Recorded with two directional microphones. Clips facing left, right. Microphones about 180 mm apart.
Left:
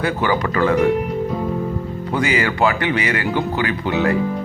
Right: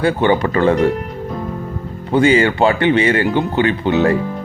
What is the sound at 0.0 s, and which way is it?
Speech, 30° right (ahead or behind).